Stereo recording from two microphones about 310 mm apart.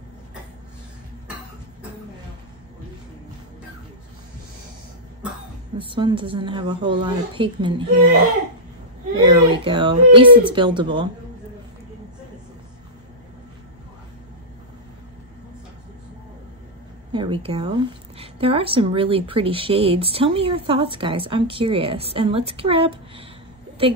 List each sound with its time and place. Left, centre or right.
5.8 s speech: centre
9.1 s speech: centre
17.1 s speech: centre